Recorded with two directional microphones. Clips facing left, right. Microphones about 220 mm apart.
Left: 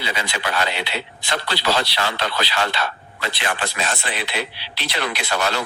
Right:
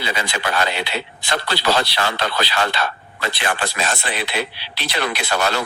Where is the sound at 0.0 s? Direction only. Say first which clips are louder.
Right 2 dB; 45° right (ahead or behind).